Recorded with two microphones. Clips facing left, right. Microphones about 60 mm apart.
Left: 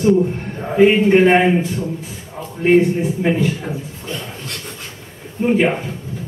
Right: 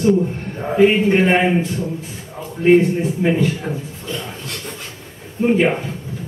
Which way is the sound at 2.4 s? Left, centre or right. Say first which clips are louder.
Left 1 dB; centre.